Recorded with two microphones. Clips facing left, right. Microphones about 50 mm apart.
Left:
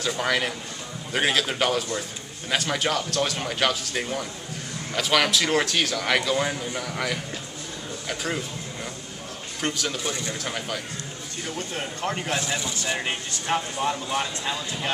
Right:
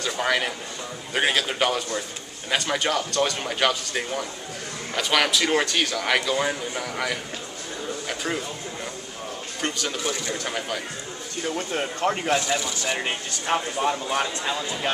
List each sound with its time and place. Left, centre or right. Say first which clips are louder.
0.0 s speech: right 1 dB; centre
9.6 s speech: even; centre
12.4 s speech: right 3 dB; centre
12.8 s speech: right 1 dB; centre